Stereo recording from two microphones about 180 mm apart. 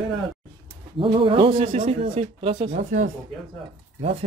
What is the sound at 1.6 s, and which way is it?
Speech, 45° right (ahead or behind).